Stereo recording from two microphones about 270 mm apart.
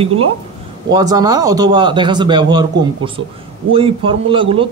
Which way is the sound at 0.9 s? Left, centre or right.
Centre.